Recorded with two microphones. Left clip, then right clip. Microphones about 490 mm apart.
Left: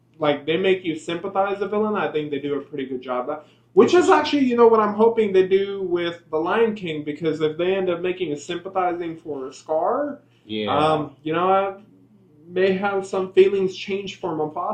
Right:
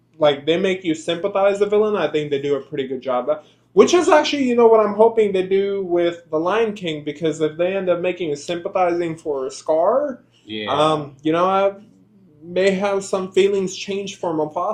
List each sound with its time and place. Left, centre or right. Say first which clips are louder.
0.2 s speech: right 4 dB; right